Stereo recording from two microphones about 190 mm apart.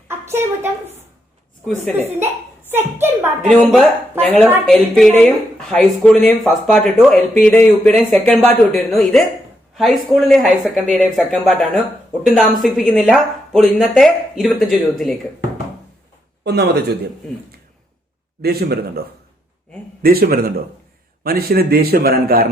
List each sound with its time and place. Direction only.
0.1 s a woman's voice: 15° right (ahead or behind)
1.6 s speech: 5° left (ahead or behind)
2.1 s a child's voice: 10° right (ahead or behind)
3.4 s speech: centre (ahead or behind)
4.4 s a child's voice: 10° right (ahead or behind)
4.6 s speech: centre (ahead or behind)
16.4 s speech: 60° right (ahead or behind)
18.4 s a man's voice: 55° right (ahead or behind)